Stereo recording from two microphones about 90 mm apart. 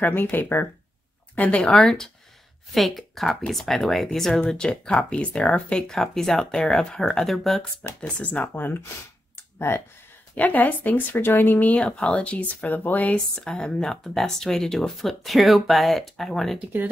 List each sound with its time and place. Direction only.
0.0 s speech: 20° left (ahead or behind)
1.6 s speech: 5° left (ahead or behind)
7.8 s speech: 15° left (ahead or behind); by 9.8 s 30° left (ahead or behind)
10.3 s speech: 15° left (ahead or behind)